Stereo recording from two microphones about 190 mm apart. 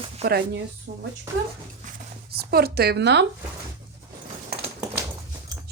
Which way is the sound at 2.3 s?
55° right (ahead or behind).